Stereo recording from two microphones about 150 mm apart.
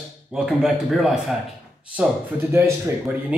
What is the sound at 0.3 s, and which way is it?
Speech, 5° right (ahead or behind).